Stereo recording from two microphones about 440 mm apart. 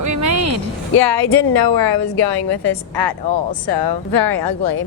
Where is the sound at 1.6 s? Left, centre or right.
Left.